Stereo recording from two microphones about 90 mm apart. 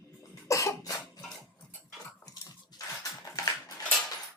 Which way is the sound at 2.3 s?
45° left (ahead or behind).